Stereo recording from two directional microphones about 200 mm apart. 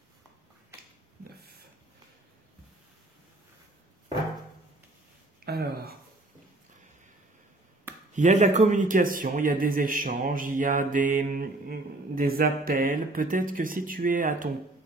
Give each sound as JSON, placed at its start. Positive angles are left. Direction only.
{"t": 5.4, "sound": "speech", "side_deg": -50}
{"t": 8.1, "sound": "a man's voice", "side_deg": -35}